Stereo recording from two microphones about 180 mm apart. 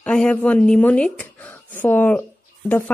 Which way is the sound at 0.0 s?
5° left (ahead or behind).